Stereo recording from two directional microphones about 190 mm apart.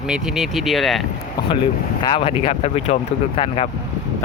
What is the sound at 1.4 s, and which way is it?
Boat, 20° left (ahead or behind).